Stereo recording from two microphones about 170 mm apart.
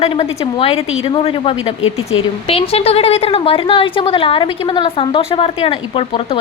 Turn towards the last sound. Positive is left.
turn(degrees=35)  # may be behind; listen again after turning